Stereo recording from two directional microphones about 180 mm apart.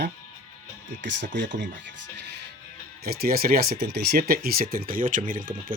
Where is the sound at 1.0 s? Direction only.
80° right.